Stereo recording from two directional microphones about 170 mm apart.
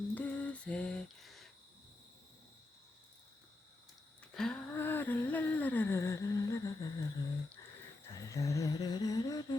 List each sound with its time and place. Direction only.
0.1 s lullaby: 10° left (ahead or behind)
4.4 s humming: 5° left (ahead or behind); by 9.6 s 20° left (ahead or behind)